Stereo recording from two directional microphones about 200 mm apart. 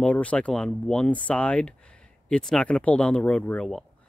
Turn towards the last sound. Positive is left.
turn(degrees=0)  # may be behind; listen again after turning